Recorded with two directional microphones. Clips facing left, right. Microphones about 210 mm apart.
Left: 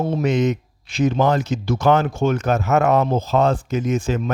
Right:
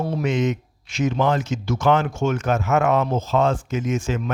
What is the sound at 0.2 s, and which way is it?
Speech, 40° left (ahead or behind).